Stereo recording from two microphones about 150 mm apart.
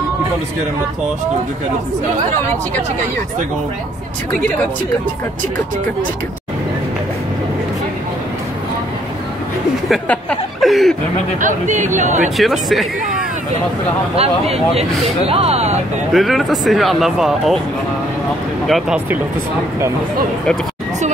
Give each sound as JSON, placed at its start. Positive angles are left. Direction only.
{"t": 10.6, "sound": "chuckle", "side_deg": 0}
{"t": 11.4, "sound": "speech", "side_deg": -55}
{"t": 12.4, "sound": "speech", "side_deg": 0}
{"t": 14.1, "sound": "speech", "side_deg": -40}
{"t": 16.1, "sound": "speech", "side_deg": 0}
{"t": 18.7, "sound": "speech", "side_deg": -5}